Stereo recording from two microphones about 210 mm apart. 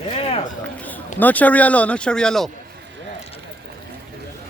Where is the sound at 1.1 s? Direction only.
5° left (ahead or behind).